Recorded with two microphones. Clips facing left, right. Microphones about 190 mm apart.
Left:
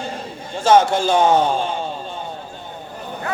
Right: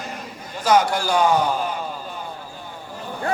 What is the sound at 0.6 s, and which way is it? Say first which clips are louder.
A man's voice: left 4 dB; 25° left (ahead or behind).